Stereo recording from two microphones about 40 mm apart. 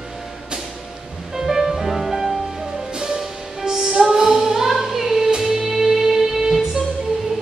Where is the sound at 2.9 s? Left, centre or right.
Centre.